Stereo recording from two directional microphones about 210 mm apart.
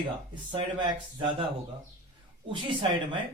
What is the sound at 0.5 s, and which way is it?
Speech, 20° right (ahead or behind).